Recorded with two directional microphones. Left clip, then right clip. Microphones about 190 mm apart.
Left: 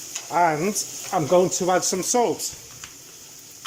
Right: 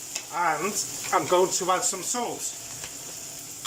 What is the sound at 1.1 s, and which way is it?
Speech, 15° left (ahead or behind).